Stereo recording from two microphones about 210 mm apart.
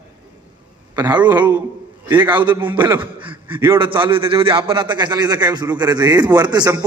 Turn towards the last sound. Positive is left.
turn(degrees=-20)  # may be behind; listen again after turning